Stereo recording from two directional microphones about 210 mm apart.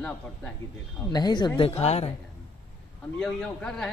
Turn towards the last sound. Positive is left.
turn(degrees=5)  # may be behind; listen again after turning